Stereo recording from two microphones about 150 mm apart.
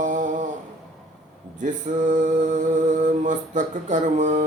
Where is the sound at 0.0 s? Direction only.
55° right (ahead or behind).